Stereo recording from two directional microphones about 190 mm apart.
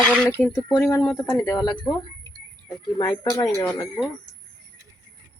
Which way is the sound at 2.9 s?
20° left (ahead or behind).